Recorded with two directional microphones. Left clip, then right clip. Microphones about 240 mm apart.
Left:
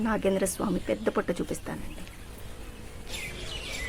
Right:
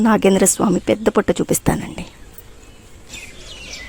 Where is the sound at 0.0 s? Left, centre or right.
Right.